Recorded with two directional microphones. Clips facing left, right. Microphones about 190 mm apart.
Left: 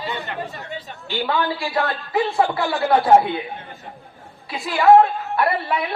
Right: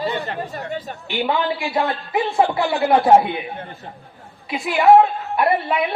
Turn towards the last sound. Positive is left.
turn(degrees=-20)  # may be behind; listen again after turning